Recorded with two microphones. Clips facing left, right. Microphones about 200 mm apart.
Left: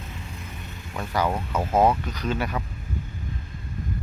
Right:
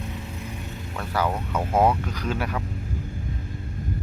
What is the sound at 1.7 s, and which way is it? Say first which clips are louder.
Speech: left 1 dB; 10° right (ahead or behind).